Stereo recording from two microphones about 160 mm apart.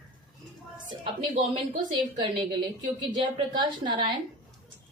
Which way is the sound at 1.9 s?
30° right (ahead or behind).